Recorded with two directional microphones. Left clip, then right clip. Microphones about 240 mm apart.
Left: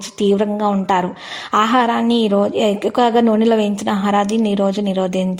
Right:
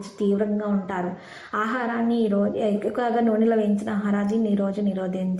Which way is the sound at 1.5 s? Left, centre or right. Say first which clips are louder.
Left 11 dB; left.